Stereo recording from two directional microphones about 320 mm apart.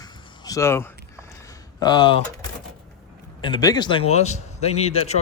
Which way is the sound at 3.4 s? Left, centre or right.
Centre.